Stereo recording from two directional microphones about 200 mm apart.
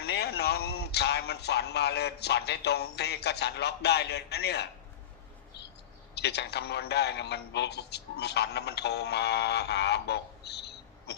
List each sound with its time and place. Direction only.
0.0 s speech: 55° left (ahead or behind)
6.1 s a man's voice: 55° left (ahead or behind)